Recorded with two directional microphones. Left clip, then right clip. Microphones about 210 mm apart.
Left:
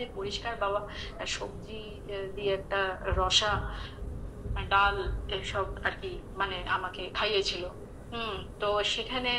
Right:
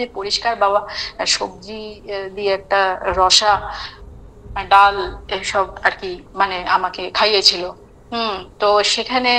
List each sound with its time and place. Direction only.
0.0 s a woman's voice: 55° right (ahead or behind)